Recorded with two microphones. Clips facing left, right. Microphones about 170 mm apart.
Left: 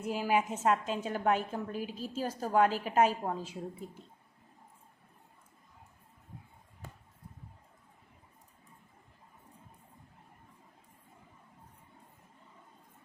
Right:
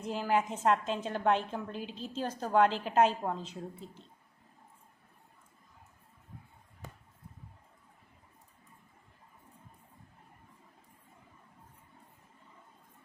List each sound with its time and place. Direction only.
0.0 s a woman's voice: 10° left (ahead or behind)